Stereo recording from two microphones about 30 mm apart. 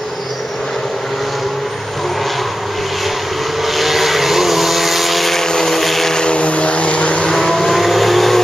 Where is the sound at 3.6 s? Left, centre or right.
Centre.